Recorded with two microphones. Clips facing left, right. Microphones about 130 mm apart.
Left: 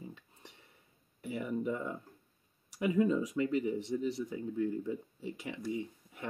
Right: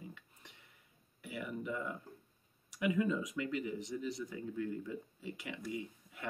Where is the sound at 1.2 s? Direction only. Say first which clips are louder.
Left 7 dB; 30° left (ahead or behind).